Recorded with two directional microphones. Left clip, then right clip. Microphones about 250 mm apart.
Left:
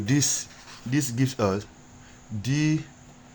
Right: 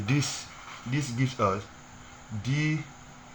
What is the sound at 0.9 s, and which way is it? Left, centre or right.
Speech, left.